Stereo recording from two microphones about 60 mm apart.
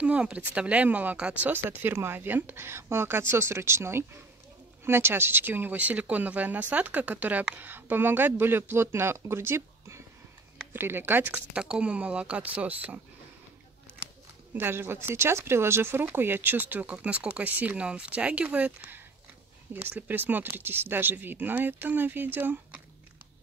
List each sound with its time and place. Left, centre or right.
0.0 s speech: right
1.5 s speech: right
11.3 s speech: centre
14.5 s speech: right
19.7 s speech: right